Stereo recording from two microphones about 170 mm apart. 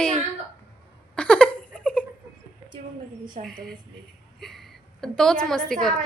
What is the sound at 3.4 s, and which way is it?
A woman's voice, 5° left (ahead or behind).